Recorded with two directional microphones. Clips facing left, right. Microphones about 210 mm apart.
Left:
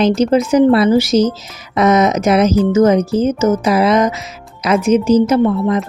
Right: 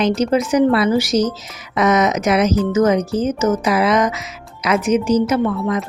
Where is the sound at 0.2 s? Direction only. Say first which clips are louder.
Left 4 dB; 30° left (ahead or behind).